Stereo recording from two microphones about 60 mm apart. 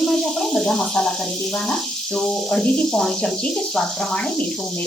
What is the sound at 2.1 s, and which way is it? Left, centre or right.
Speech, centre.